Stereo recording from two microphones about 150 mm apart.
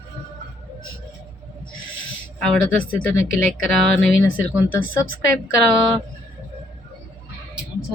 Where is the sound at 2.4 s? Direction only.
5° left (ahead or behind).